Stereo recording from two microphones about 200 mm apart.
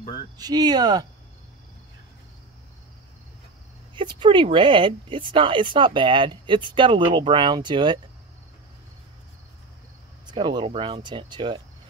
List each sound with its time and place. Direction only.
0.4 s speech: 20° right (ahead or behind)
3.9 s speech: 25° right (ahead or behind)
10.3 s speech: 25° right (ahead or behind)